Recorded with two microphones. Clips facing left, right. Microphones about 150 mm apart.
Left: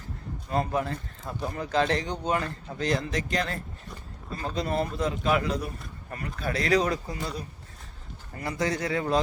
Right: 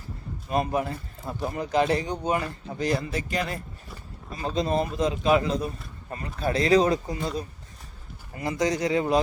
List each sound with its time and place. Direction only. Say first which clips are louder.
0.5 s speech: right 2 dB; 15° right (ahead or behind)
8.4 s speech: right 3 dB; 20° right (ahead or behind)